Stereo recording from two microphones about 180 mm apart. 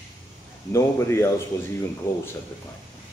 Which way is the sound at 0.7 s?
15° left (ahead or behind).